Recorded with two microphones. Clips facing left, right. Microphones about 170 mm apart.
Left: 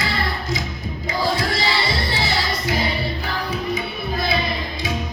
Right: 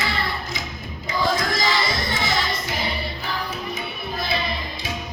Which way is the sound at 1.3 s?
30° left (ahead or behind).